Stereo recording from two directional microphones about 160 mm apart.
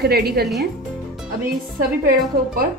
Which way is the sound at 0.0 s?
80° right.